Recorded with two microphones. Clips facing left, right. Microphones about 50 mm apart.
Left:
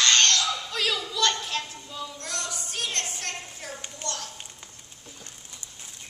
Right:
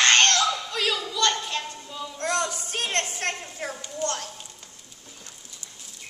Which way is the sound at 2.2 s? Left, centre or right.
Right.